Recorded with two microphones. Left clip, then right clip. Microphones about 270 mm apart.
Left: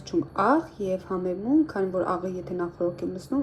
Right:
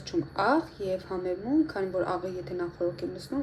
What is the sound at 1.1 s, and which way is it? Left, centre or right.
A woman's voice, left.